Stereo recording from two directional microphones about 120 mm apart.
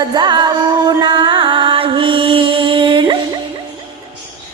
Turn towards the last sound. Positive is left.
turn(degrees=-45)  # may be behind; listen again after turning